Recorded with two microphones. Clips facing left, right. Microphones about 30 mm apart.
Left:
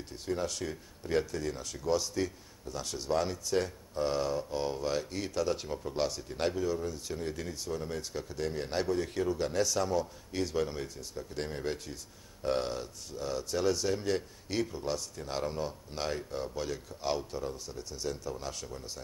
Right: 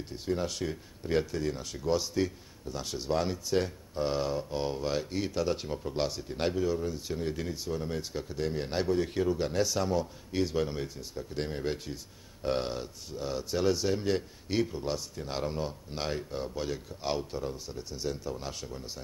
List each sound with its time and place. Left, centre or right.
0.1 s speech: centre